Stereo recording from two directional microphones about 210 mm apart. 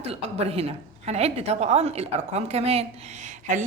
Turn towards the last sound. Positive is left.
turn(degrees=-35)  # may be behind; listen again after turning